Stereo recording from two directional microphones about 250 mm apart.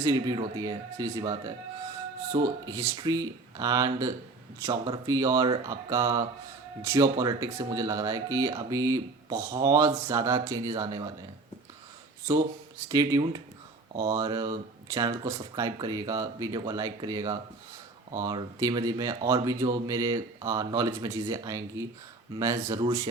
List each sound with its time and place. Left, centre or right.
0.0 s speech: centre
12.9 s speech: centre